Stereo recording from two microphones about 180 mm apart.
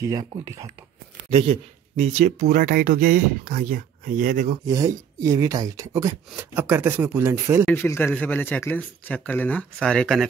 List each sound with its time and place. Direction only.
0.0 s speech: 20° right (ahead or behind)
1.3 s speech: 35° right (ahead or behind)
2.2 s speech: 55° right (ahead or behind)
4.6 s speech: 20° right (ahead or behind)
7.6 s speech: 10° left (ahead or behind)